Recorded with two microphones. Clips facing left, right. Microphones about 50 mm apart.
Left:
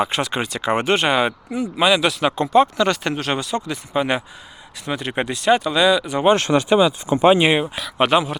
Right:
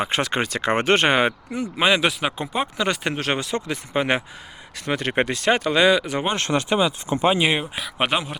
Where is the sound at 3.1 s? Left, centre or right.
Right.